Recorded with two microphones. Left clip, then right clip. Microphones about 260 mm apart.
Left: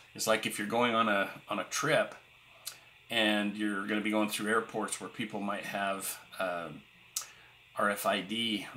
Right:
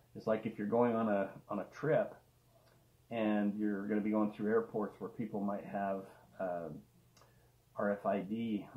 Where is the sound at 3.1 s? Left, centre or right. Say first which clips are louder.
Left 6 dB; left.